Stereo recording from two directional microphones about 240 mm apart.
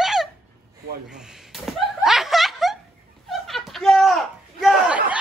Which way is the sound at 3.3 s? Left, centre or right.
Centre.